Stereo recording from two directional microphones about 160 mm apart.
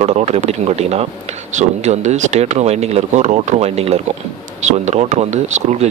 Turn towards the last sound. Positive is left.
turn(degrees=-45)  # may be behind; listen again after turning